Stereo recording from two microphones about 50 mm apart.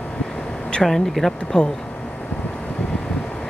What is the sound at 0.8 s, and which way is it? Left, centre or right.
Speech, centre.